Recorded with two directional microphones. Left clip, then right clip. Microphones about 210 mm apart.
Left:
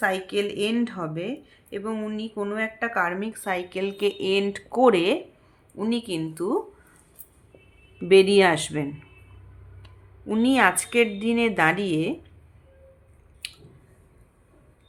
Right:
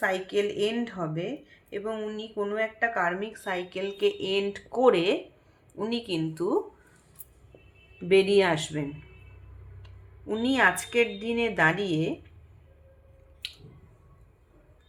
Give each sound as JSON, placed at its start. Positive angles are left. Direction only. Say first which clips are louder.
{"t": 0.0, "sound": "speech", "louder": "left 2 dB", "side_deg": 30}
{"t": 8.0, "sound": "speech", "louder": "left 5 dB", "side_deg": 35}